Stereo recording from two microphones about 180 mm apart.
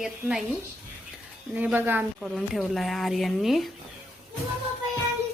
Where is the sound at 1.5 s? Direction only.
10° right (ahead or behind).